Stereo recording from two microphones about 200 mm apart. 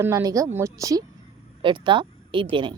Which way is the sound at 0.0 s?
15° right (ahead or behind).